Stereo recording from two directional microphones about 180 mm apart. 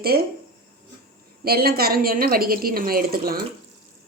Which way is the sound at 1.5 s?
55° right (ahead or behind).